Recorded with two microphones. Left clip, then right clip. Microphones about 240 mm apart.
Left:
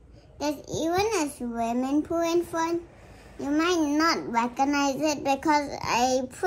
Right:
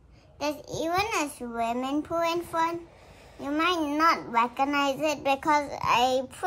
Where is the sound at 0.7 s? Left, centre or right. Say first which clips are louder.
Left 2 dB; right.